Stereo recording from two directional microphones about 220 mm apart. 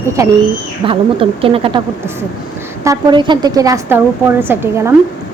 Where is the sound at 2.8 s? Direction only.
15° right (ahead or behind).